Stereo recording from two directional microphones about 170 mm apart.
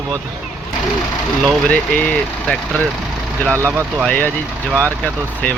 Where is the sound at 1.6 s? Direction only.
5° left (ahead or behind).